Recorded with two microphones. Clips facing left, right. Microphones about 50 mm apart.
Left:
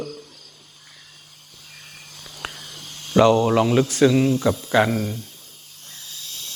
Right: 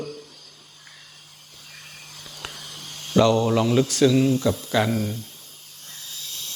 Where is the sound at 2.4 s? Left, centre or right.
Left.